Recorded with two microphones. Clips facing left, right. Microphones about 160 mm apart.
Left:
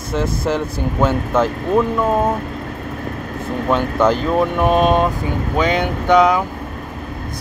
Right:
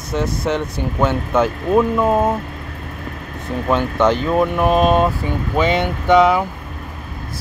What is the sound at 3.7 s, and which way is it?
Speech, centre (ahead or behind).